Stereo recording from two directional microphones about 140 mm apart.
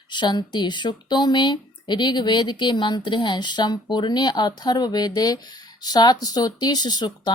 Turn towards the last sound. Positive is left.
turn(degrees=30)  # may be behind; listen again after turning